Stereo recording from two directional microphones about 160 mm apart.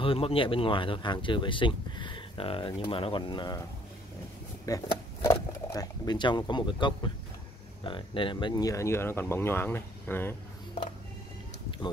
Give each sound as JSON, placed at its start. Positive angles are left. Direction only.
{"t": 0.0, "sound": "speech", "side_deg": 35}
{"t": 4.6, "sound": "speech", "side_deg": 20}